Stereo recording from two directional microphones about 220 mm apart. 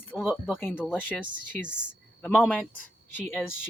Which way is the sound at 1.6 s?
5° right (ahead or behind).